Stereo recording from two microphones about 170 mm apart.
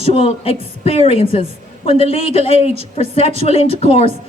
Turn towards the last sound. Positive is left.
turn(degrees=35)  # may be behind; listen again after turning